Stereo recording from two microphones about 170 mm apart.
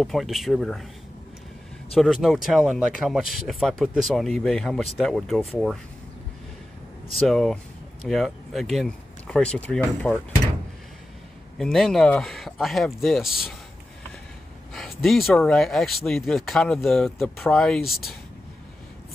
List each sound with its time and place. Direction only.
0.0 s speech: centre (ahead or behind)
2.0 s speech: centre (ahead or behind)
7.2 s speech: centre (ahead or behind)
11.5 s speech: centre (ahead or behind)
14.7 s speech: centre (ahead or behind)